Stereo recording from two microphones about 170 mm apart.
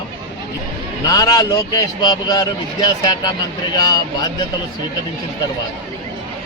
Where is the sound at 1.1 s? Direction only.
20° left (ahead or behind).